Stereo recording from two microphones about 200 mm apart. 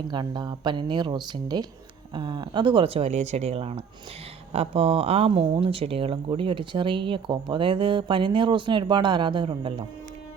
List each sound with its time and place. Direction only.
0.1 s speech: 20° right (ahead or behind)